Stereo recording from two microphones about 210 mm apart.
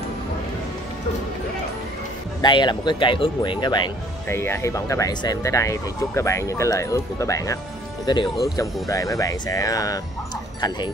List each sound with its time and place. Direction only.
2.4 s speech: 20° left (ahead or behind)